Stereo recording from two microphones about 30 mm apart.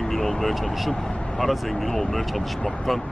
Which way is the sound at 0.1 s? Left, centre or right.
Centre.